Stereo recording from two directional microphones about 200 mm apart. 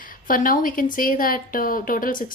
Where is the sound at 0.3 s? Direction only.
45° left (ahead or behind).